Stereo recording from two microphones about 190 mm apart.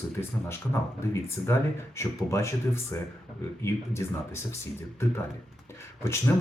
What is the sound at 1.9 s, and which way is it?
Speech, 15° left (ahead or behind).